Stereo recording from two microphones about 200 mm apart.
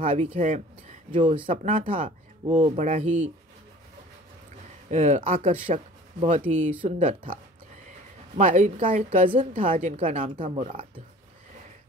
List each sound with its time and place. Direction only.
0.0 s speech: 30° right (ahead or behind)
1.1 s a woman's voice: 25° right (ahead or behind); by 2.1 s 40° right (ahead or behind)
2.4 s speech: 25° right (ahead or behind)
2.8 s a woman's voice: 35° right (ahead or behind)
4.9 s a woman's voice: 35° right (ahead or behind)
8.4 s a woman's voice: 40° right (ahead or behind)